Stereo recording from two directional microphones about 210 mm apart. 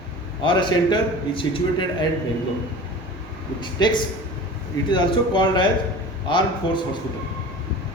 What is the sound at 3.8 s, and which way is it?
A man's voice, 20° left (ahead or behind).